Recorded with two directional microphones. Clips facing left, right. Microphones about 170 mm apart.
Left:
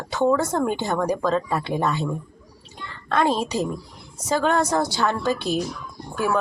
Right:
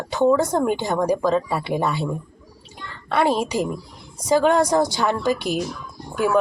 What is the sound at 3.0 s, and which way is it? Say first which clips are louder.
Speech: right 1 dB; 10° right (ahead or behind).